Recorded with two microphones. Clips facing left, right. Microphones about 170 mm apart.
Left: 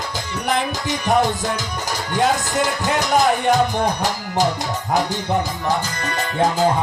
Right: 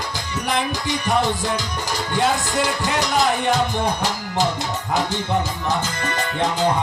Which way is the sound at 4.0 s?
15° left (ahead or behind).